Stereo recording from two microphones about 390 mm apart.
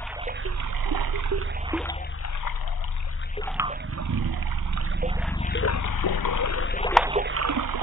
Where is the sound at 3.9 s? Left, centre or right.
Right.